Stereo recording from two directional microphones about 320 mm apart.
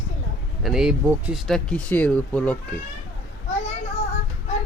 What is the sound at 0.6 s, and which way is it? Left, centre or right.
Speech, centre.